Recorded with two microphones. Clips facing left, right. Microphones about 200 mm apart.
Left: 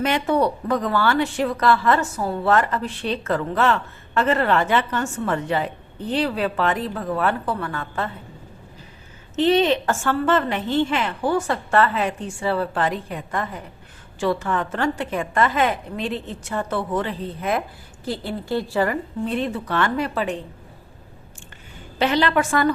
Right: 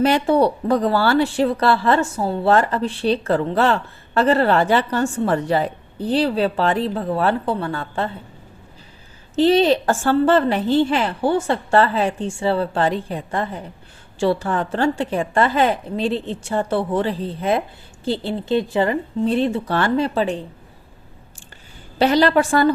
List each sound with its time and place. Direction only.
0.0 s a woman's voice: 30° right (ahead or behind)
9.3 s a woman's voice: 35° right (ahead or behind)
21.9 s a woman's voice: 40° right (ahead or behind)